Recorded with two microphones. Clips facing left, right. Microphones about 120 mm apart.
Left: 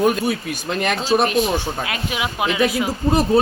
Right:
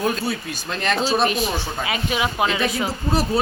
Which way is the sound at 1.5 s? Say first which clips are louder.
Left 3 dB; 15° left (ahead or behind).